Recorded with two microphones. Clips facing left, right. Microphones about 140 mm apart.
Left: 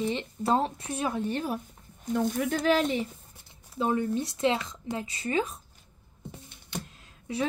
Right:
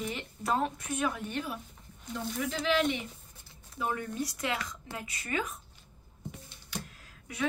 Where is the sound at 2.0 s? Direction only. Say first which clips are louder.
Left 7 dB; 50° left (ahead or behind).